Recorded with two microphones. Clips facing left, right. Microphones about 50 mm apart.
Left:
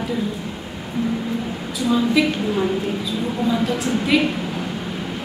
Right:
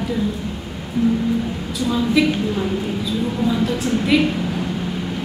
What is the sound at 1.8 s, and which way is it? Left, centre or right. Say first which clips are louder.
A woman's voice: even; centre.